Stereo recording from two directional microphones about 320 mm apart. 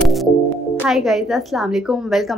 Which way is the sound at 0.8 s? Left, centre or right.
Centre.